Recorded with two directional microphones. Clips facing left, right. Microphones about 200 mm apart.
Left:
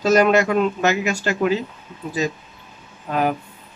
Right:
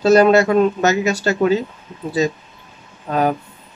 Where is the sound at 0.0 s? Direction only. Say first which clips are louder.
Right 4 dB; 35° right (ahead or behind).